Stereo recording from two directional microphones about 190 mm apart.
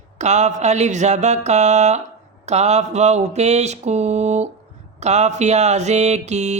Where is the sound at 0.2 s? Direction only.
40° right (ahead or behind).